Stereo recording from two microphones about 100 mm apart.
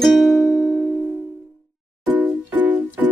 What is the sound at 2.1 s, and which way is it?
Music, 15° right (ahead or behind).